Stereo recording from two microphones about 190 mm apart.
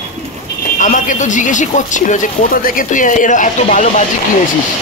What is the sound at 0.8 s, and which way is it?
Speech, 40° left (ahead or behind).